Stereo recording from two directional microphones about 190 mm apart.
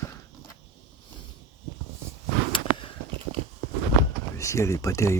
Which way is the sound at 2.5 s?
25° left (ahead or behind).